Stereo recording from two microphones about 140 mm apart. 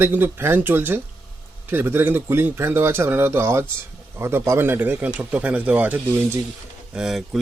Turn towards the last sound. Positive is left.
turn(degrees=-5)  # may be behind; listen again after turning